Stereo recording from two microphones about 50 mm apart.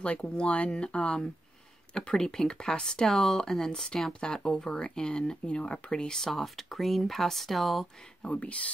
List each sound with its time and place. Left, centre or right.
0.0 s speech: left; by 7.9 s centre
8.2 s speech: left